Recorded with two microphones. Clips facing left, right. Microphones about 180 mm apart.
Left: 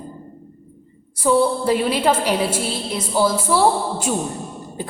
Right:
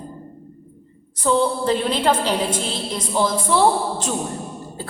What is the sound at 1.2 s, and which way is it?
A woman's voice, 10° left (ahead or behind).